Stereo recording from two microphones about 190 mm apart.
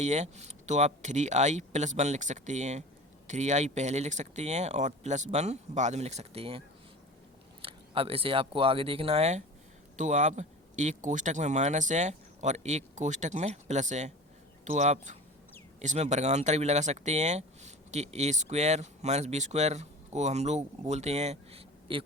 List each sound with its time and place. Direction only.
0.0 s speech: 35° right (ahead or behind)
7.6 s speech: 30° right (ahead or behind)